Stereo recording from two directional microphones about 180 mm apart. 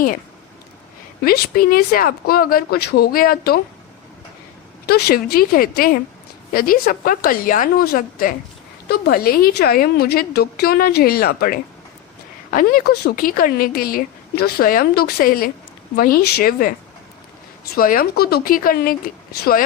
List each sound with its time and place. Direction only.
1.2 s a woman's voice: 55° left (ahead or behind)
4.9 s a woman's voice: 60° left (ahead or behind)
17.7 s a woman's voice: 55° left (ahead or behind)